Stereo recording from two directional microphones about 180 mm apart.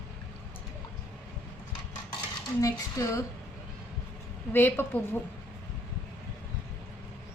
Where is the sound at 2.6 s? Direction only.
15° left (ahead or behind).